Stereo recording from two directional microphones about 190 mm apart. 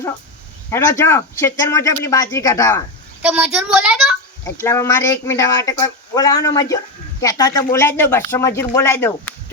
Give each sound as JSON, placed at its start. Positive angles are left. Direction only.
{"t": 0.7, "sound": "speech", "side_deg": 15}
{"t": 3.2, "sound": "a woman's voice", "side_deg": -10}
{"t": 4.4, "sound": "speech", "side_deg": 15}